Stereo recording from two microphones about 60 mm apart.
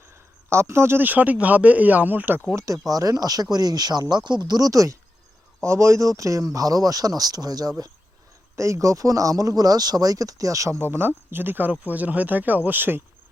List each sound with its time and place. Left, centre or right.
0.0 s a sound: right
1.0 s speech: right
2.6 s speech: right
2.9 s speech: right
5.6 s speech: right
8.5 s speech: right
10.8 s speech: right